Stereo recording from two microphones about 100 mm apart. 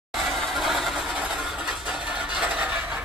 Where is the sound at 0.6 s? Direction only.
Centre (ahead or behind).